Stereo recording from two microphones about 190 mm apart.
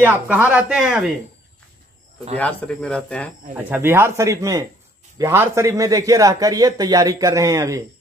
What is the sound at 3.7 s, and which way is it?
A man's voice, 10° right (ahead or behind).